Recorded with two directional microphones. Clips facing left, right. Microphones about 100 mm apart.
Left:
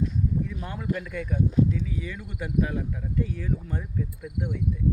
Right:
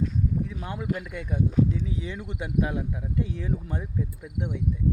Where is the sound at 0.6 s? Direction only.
15° right (ahead or behind).